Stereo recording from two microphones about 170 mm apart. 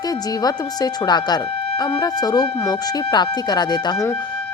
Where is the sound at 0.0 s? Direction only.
20° left (ahead or behind).